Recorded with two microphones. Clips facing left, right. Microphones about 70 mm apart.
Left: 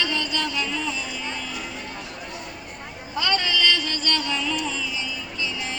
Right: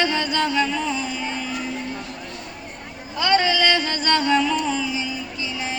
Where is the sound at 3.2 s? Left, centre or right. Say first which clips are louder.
Right 5 dB; right.